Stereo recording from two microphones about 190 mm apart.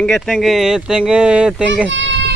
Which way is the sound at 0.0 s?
Centre (ahead or behind).